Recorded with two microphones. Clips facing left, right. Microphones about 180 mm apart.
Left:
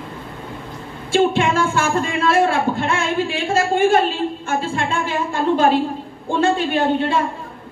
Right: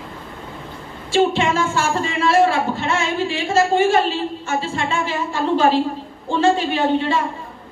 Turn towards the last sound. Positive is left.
turn(degrees=55)  # may be behind; listen again after turning